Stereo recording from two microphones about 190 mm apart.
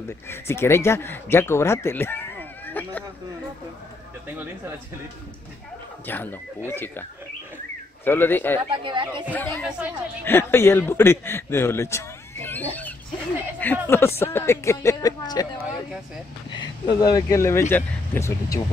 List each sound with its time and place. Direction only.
0.3 s speech: 15° left (ahead or behind)
6.0 s speech: 10° left (ahead or behind)
8.8 s speech: 25° right (ahead or behind)
9.3 s a man's voice: 10° left (ahead or behind)
16.8 s speech: 20° left (ahead or behind)